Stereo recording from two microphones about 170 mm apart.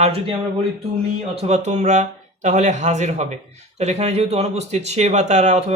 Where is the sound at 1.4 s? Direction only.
40° right (ahead or behind).